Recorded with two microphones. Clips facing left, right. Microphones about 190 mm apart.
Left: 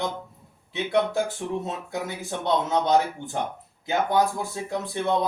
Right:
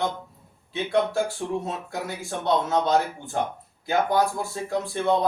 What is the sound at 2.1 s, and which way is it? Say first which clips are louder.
Speech: right 1 dB; 20° left (ahead or behind).